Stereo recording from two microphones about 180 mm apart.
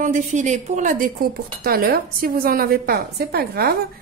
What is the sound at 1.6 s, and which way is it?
Speech, 55° right (ahead or behind).